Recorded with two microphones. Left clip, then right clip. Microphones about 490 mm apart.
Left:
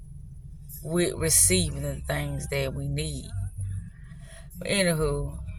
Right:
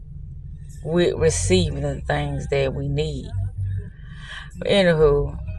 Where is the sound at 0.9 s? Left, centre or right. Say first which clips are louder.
Right 8 dB; left.